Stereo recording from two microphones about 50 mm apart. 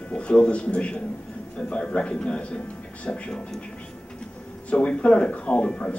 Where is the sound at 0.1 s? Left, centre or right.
Left.